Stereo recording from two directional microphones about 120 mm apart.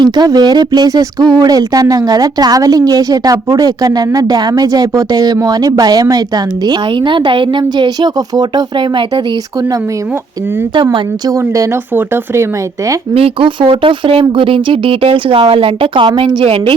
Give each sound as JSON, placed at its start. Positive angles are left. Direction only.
{"t": 0.0, "sound": "speech", "side_deg": -35}
{"t": 11.3, "sound": "speech", "side_deg": -25}
{"t": 13.1, "sound": "speech", "side_deg": -50}